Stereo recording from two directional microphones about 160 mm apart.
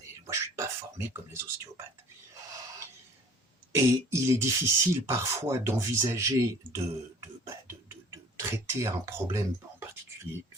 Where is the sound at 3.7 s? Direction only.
20° right (ahead or behind).